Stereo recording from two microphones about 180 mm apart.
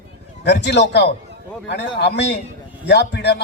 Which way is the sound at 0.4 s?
70° left (ahead or behind).